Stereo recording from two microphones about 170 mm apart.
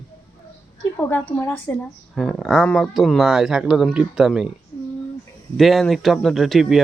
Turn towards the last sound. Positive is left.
turn(degrees=0)  # may be behind; listen again after turning